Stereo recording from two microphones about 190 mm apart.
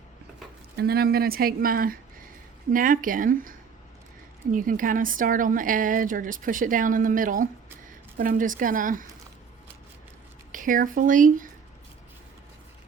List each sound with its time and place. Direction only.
0.8 s a woman's voice: 55° right (ahead or behind)
10.5 s speech: 45° right (ahead or behind)